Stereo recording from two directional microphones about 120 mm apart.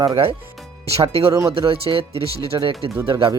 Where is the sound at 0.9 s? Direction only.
55° right (ahead or behind).